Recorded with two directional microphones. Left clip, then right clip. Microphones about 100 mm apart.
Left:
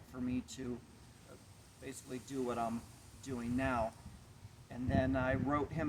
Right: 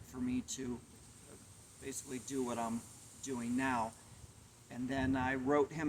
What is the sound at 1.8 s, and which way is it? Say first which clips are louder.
Speech: right 2 dB; 30° left (ahead or behind).